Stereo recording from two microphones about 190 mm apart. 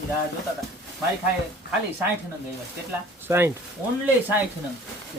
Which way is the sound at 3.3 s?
10° right (ahead or behind).